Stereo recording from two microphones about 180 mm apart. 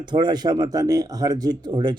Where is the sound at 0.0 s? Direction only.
25° right (ahead or behind).